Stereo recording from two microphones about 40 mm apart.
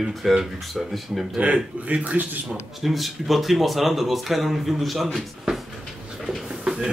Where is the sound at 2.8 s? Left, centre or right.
Centre.